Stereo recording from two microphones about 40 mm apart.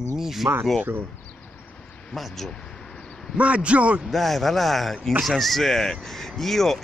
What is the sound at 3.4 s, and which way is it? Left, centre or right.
Speech, right.